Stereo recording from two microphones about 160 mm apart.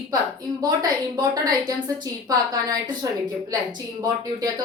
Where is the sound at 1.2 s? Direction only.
25° right (ahead or behind).